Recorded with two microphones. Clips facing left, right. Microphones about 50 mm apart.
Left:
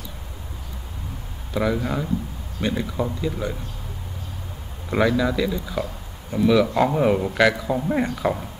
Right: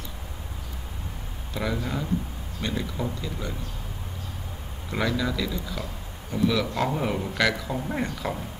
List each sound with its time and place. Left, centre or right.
1.5 s a man's voice: centre
4.9 s a man's voice: centre